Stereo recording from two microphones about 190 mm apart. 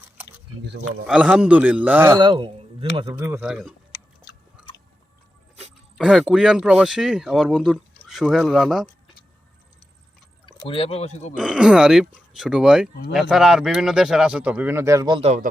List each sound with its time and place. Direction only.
1.0 s a man's voice: 5° right (ahead or behind)
2.1 s a man's voice: 25° right (ahead or behind)
3.2 s speech: 10° right (ahead or behind)
6.0 s speech: centre (ahead or behind)
10.4 s speech: 30° left (ahead or behind)
11.3 s speech: 5° right (ahead or behind); by 15.4 s 35° right (ahead or behind)